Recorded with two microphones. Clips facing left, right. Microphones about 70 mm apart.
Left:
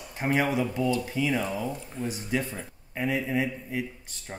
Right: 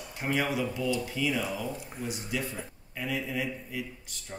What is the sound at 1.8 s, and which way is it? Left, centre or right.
Speech, centre.